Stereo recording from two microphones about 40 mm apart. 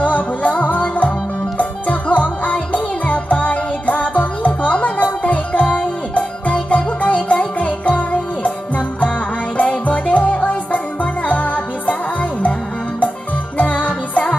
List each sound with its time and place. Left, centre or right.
0.0 s music: left
13.6 s music: left